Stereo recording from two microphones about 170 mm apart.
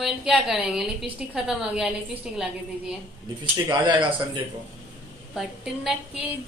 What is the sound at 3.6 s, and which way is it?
Speech, 25° right (ahead or behind).